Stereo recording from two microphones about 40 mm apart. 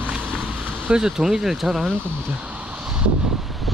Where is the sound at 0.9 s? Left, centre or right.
Centre.